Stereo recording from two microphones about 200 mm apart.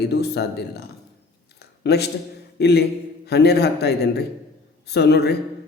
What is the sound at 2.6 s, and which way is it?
A man's voice, 55° left (ahead or behind).